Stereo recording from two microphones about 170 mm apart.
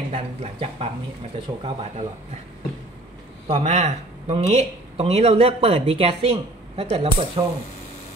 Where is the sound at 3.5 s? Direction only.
40° right (ahead or behind).